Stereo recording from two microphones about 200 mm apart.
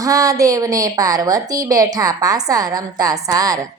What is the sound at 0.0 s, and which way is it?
A woman's voice, 15° right (ahead or behind).